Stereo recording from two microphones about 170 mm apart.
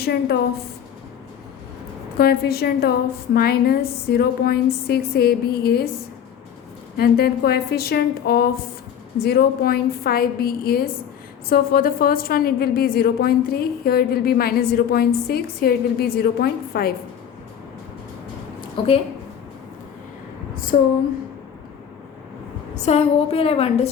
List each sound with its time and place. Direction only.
0.0 s a woman's voice: 75° left (ahead or behind)
2.1 s a woman's voice: 65° left (ahead or behind)
6.9 s a woman's voice: 65° left (ahead or behind)
20.7 s speech: 50° left (ahead or behind)
22.7 s a woman's voice: 40° left (ahead or behind)